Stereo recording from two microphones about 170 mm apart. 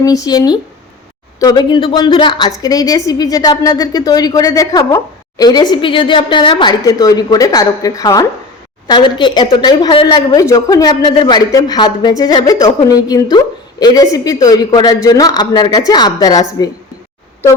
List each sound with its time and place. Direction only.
0.0 s a woman's voice: 20° left (ahead or behind)